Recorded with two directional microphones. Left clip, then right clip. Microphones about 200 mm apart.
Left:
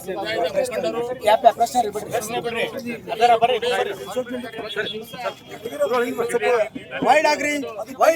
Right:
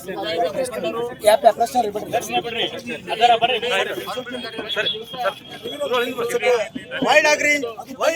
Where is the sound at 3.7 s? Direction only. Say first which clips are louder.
Right 1 dB; 15° left (ahead or behind).